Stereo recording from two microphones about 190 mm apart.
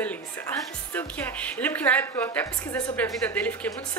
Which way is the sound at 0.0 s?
10° left (ahead or behind).